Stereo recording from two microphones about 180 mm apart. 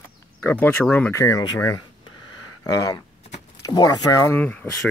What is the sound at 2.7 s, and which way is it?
Speech, 20° left (ahead or behind).